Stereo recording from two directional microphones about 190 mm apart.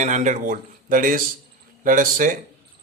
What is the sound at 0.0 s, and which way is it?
Speech, 40° right (ahead or behind).